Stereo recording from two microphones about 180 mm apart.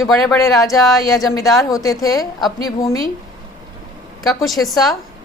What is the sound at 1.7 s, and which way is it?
A woman's voice, 20° left (ahead or behind).